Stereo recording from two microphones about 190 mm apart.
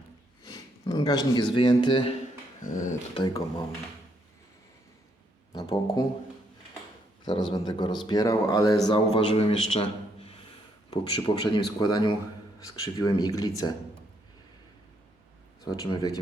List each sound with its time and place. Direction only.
0.4 s a sound: 20° left (ahead or behind)
1.5 s speech: 25° left (ahead or behind)
2.6 s dog: 45° left (ahead or behind)
3.2 s speech: 20° left (ahead or behind)
5.5 s speech: 20° left (ahead or behind)
7.3 s a man's voice: 25° left (ahead or behind)
15.6 s speech: 20° left (ahead or behind)